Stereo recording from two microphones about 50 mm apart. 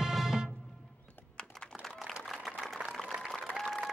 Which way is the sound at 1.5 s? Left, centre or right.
Centre.